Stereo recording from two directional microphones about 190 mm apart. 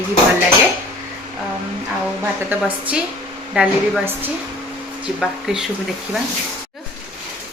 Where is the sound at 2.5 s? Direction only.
10° right (ahead or behind).